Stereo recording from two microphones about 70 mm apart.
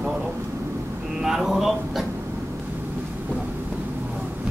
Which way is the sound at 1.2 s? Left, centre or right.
Centre.